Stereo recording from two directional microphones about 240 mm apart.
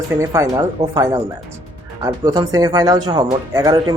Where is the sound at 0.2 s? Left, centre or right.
Centre.